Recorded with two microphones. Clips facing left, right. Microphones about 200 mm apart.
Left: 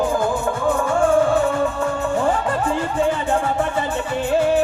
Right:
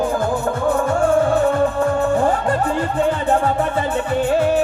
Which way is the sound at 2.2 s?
60° right (ahead or behind).